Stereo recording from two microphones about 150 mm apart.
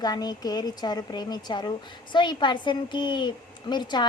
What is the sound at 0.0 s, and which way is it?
A woman's voice, 25° left (ahead or behind).